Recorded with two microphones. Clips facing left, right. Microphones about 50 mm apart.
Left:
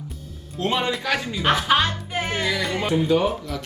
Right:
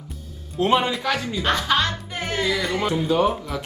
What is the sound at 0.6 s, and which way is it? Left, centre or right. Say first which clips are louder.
Speech: right 5 dB; centre.